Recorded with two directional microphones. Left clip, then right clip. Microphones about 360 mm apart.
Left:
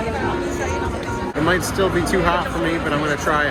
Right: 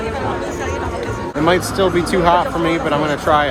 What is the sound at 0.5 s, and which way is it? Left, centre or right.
Music, right.